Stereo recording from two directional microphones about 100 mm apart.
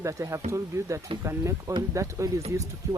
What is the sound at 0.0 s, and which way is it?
Speech, 30° right (ahead or behind).